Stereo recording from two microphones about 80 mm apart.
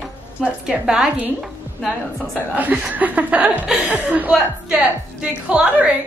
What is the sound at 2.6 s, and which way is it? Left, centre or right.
A woman's voice, right.